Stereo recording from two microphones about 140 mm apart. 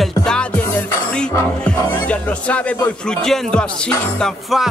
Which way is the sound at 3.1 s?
5° left (ahead or behind).